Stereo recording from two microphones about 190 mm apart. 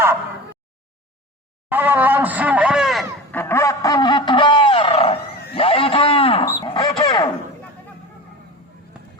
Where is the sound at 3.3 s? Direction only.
10° left (ahead or behind).